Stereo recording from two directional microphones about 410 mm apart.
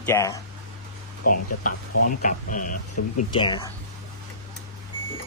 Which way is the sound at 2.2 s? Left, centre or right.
Centre.